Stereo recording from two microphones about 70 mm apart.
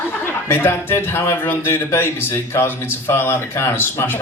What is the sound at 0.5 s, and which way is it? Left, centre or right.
A man's voice, left.